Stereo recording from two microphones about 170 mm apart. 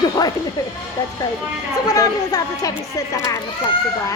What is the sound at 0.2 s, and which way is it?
Speech, 25° left (ahead or behind).